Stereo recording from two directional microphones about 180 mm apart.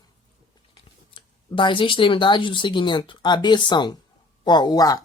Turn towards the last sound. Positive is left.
turn(degrees=20)  # may be behind; listen again after turning